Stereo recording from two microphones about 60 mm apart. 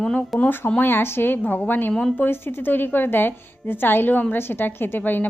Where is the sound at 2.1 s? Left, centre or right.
Left.